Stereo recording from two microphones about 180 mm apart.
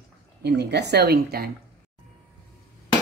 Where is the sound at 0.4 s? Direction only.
65° right (ahead or behind).